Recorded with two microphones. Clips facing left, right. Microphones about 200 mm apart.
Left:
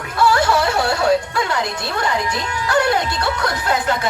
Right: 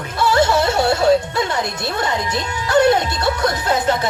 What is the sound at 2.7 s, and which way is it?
Speech, 25° right (ahead or behind).